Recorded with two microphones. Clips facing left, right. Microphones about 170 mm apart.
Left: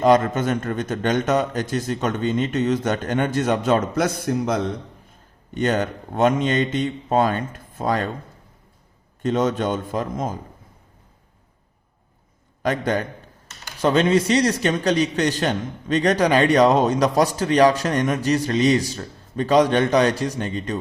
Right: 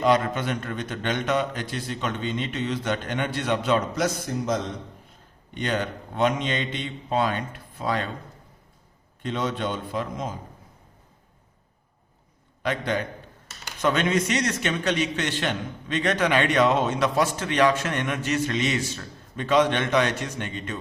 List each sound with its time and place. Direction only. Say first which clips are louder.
0.0 s a man's voice: left 5 dB; 45° left (ahead or behind); by 4.6 s 65° left (ahead or behind)
5.5 s a man's voice: left 6 dB; 45° left (ahead or behind)
9.2 s a man's voice: left 7 dB; 45° left (ahead or behind)
12.6 s a man's voice: left 4 dB; 45° left (ahead or behind)
13.8 s a man's voice: left 5 dB; 30° left (ahead or behind)